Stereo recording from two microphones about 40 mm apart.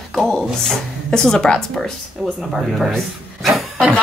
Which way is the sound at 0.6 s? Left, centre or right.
Centre.